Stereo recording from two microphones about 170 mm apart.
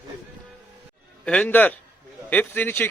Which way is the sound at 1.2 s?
5° left (ahead or behind).